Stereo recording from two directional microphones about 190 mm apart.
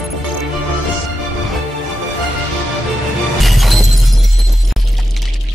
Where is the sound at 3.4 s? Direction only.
Centre (ahead or behind).